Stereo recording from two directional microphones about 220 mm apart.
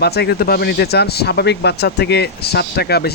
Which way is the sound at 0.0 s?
45° left (ahead or behind).